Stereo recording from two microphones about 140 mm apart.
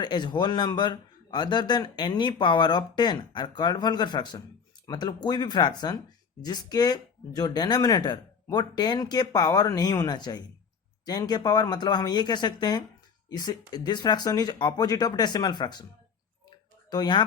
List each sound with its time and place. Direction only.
0.0 s speech: 30° left (ahead or behind)
16.9 s speech: 30° left (ahead or behind)